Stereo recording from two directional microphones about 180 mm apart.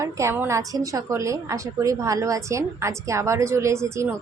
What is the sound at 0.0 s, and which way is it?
A woman's voice, 15° right (ahead or behind).